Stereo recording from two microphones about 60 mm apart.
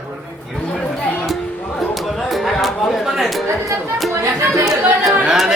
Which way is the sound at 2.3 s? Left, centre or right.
Centre.